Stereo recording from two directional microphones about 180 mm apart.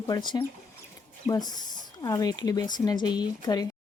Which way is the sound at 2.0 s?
20° left (ahead or behind).